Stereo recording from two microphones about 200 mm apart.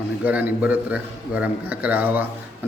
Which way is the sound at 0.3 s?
10° right (ahead or behind).